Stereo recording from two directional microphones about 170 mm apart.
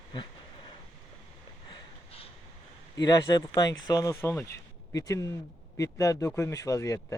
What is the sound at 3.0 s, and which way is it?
Speech, 25° left (ahead or behind).